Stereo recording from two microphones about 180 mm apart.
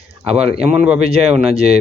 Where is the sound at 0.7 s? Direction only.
5° right (ahead or behind).